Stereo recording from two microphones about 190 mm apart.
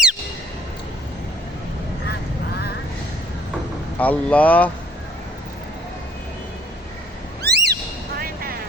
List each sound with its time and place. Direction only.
3.9 s speech: 10° left (ahead or behind)
7.4 s a sound: 60° right (ahead or behind)
8.2 s vehicle: 50° right (ahead or behind)